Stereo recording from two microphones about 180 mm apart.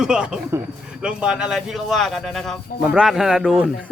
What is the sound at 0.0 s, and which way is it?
Speech, 5° right (ahead or behind).